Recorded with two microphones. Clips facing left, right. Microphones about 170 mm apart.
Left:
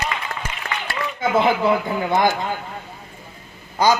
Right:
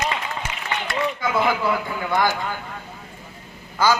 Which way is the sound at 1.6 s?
20° left (ahead or behind).